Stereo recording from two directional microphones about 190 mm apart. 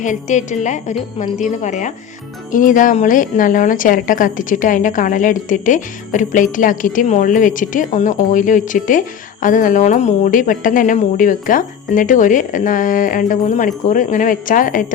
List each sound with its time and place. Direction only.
0.0 s a woman's voice: 40° left (ahead or behind)